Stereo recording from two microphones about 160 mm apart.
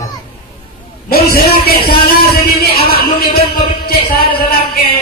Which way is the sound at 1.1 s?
70° left (ahead or behind).